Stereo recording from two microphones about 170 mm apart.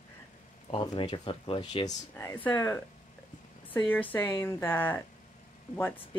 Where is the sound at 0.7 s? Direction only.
30° left (ahead or behind).